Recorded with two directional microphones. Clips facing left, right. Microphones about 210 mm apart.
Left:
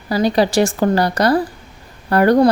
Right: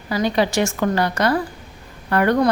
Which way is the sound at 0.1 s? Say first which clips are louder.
Left 4 dB; 35° left (ahead or behind).